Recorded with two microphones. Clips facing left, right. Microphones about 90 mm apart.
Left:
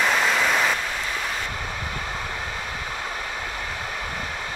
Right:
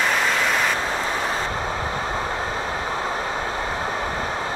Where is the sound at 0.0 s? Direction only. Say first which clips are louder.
Even; centre (ahead or behind).